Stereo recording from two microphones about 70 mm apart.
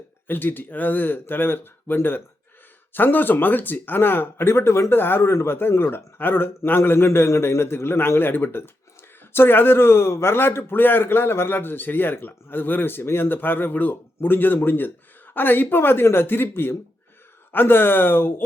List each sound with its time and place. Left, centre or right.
0.3 s a man's voice: left